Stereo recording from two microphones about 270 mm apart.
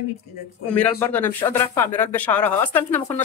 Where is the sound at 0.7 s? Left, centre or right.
Centre.